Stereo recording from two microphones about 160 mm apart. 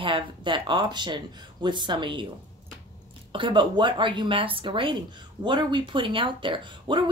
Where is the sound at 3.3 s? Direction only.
30° right (ahead or behind).